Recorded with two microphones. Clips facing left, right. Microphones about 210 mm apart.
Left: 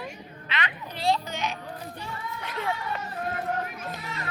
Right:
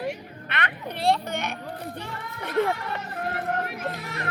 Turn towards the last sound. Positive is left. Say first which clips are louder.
# right 4 dB
turn(degrees=-70)  # may be behind; listen again after turning